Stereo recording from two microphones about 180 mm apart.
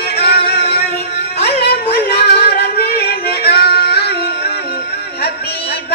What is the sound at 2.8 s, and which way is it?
Singing, 60° left (ahead or behind).